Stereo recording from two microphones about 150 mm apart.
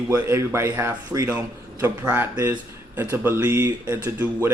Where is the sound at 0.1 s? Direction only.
20° right (ahead or behind).